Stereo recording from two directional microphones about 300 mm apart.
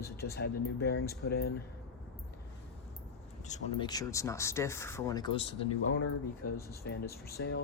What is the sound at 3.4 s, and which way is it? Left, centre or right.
Speech, centre.